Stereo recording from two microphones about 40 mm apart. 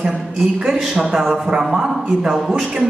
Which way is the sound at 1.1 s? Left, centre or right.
Centre.